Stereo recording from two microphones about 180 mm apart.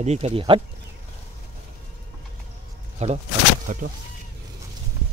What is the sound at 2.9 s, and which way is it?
Speech, 35° right (ahead or behind).